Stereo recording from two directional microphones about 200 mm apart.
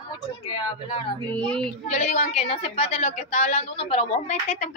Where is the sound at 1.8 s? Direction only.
35° left (ahead or behind).